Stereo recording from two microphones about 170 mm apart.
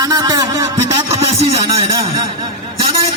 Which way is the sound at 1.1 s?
35° right (ahead or behind).